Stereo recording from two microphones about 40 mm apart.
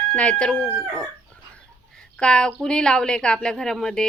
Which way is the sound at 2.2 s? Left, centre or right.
Centre.